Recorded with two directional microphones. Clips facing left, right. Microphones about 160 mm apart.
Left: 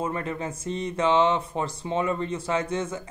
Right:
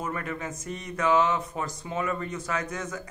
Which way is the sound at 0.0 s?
30° left (ahead or behind).